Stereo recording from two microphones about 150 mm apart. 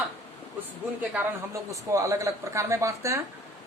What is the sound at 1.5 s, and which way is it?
Speech, 20° right (ahead or behind).